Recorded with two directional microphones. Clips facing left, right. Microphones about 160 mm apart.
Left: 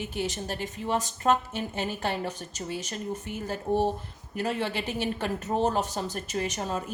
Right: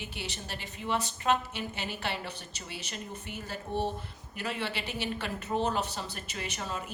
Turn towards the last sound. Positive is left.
turn(degrees=45)  # may be behind; listen again after turning